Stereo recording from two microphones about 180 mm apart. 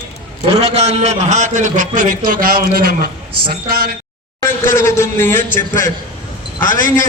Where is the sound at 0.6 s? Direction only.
35° right (ahead or behind); by 3.9 s 55° right (ahead or behind).